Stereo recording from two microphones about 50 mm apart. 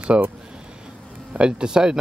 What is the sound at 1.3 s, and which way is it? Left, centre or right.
Speech, centre.